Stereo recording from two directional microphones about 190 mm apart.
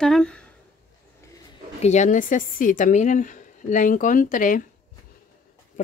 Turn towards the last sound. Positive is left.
turn(degrees=45)  # may be behind; listen again after turning